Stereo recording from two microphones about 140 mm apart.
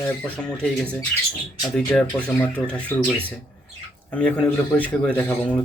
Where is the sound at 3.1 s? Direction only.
15° right (ahead or behind).